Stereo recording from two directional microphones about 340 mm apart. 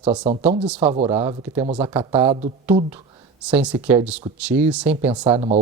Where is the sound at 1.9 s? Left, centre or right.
Centre.